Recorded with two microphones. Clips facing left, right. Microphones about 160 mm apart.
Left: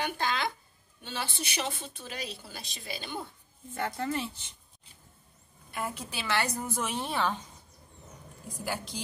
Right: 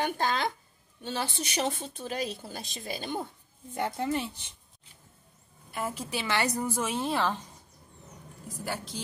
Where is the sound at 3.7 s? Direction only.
20° right (ahead or behind).